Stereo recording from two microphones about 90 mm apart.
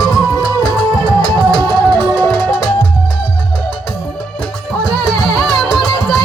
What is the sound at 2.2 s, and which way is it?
Music, 25° left (ahead or behind).